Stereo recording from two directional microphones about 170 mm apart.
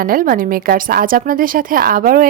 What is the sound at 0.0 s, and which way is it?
A woman's voice, 55° right (ahead or behind).